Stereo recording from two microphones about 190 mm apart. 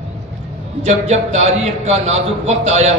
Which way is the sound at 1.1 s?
35° right (ahead or behind).